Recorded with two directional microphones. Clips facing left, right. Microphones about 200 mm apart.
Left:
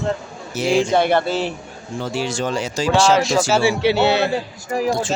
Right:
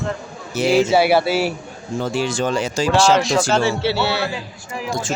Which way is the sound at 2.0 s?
50° right (ahead or behind).